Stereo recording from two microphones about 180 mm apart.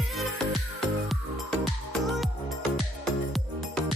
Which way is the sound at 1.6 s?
Centre (ahead or behind).